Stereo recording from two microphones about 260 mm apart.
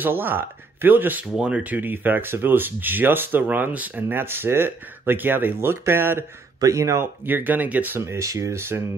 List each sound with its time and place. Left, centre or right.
0.0 s speech: centre